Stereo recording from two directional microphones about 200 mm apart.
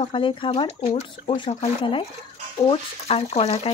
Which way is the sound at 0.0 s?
25° left (ahead or behind).